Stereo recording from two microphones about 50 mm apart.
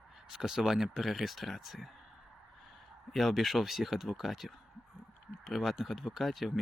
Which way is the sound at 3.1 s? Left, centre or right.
Centre.